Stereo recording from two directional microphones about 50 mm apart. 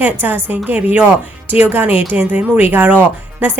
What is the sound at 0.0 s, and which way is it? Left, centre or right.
A woman's voice, right.